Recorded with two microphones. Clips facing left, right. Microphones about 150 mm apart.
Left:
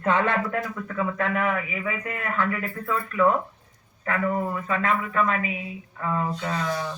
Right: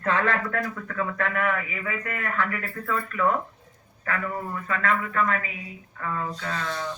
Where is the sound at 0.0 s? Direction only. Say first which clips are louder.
Left 2 dB; 20° left (ahead or behind).